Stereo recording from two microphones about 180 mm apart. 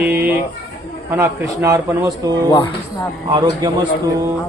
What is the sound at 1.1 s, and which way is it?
A man's voice, 15° right (ahead or behind).